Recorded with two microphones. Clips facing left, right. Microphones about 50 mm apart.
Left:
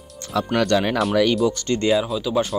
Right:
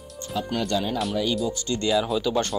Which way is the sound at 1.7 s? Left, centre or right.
Left.